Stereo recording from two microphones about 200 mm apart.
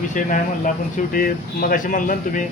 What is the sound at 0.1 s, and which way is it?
Speech, 40° left (ahead or behind).